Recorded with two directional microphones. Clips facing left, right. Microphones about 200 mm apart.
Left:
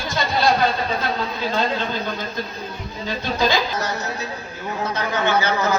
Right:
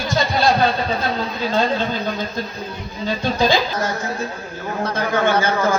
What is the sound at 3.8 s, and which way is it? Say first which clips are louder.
A man's voice: right 3 dB; 50° right (ahead or behind).